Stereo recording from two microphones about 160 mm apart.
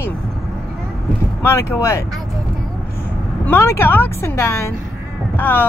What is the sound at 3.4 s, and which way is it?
Speech, 15° left (ahead or behind).